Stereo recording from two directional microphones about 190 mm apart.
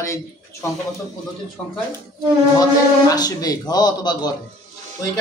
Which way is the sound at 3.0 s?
20° left (ahead or behind).